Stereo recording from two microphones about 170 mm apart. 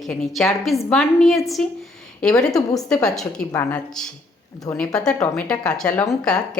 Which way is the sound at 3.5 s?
15° left (ahead or behind).